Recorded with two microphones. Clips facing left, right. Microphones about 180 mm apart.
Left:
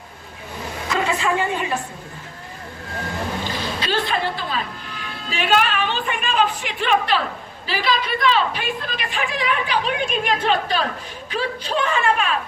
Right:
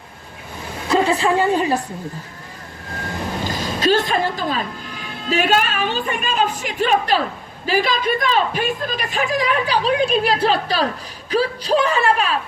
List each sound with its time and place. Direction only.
0.9 s a woman's voice: 35° right (ahead or behind)
3.4 s a sound: 45° right (ahead or behind)
5.3 s a woman's voice: 45° right (ahead or behind)